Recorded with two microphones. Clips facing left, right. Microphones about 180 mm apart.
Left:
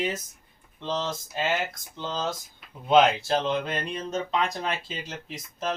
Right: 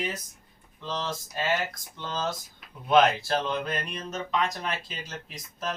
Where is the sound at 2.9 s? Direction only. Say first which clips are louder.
Left 2 dB; 20° left (ahead or behind).